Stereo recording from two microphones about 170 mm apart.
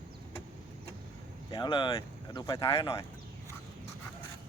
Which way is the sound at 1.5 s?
25° left (ahead or behind).